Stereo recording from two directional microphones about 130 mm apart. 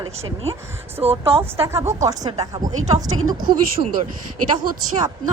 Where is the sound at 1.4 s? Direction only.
20° right (ahead or behind).